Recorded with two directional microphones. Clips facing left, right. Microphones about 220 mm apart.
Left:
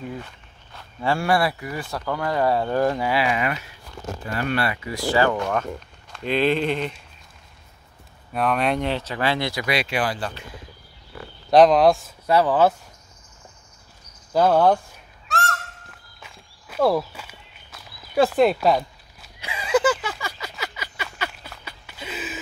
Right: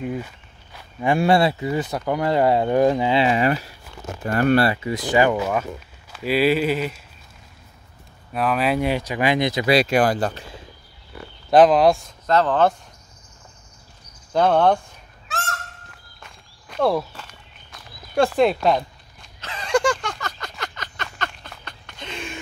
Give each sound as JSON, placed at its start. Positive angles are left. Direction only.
{"t": 0.7, "sound": "speech", "side_deg": -20}
{"t": 4.3, "sound": "speech", "side_deg": -45}
{"t": 4.8, "sound": "speech", "side_deg": -20}
{"t": 8.3, "sound": "speech", "side_deg": 0}
{"t": 9.7, "sound": "speech", "side_deg": -40}
{"t": 11.5, "sound": "speech", "side_deg": 0}
{"t": 12.3, "sound": "speech", "side_deg": 10}
{"t": 14.3, "sound": "speech", "side_deg": 5}
{"t": 15.2, "sound": "goose", "side_deg": 0}